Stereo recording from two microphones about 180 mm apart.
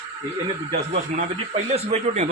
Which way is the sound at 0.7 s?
35° right (ahead or behind).